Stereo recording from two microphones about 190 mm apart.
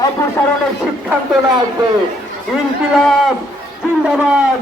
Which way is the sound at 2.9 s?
Centre (ahead or behind).